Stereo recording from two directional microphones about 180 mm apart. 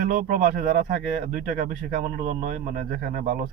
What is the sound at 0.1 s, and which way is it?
Speech, 45° right (ahead or behind).